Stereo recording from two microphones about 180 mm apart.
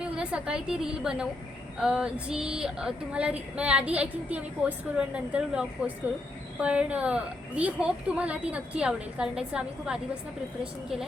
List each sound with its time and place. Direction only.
0.0 s a woman's voice: 5° right (ahead or behind)